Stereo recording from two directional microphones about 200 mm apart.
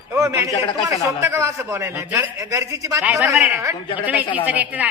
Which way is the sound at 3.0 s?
Centre (ahead or behind).